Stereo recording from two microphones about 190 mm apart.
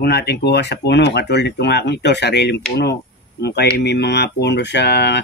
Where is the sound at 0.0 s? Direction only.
60° left (ahead or behind).